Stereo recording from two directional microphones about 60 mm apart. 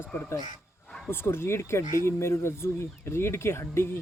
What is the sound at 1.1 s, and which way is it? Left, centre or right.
Speech, left.